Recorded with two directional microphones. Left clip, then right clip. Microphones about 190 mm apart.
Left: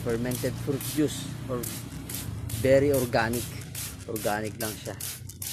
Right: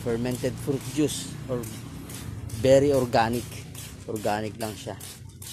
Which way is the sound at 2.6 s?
20° right (ahead or behind).